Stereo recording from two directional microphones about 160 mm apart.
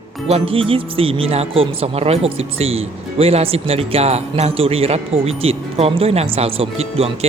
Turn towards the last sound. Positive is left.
turn(degrees=-40)  # may be behind; listen again after turning